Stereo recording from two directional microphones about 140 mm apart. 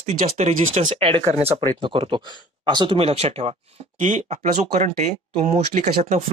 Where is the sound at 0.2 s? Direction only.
65° right (ahead or behind).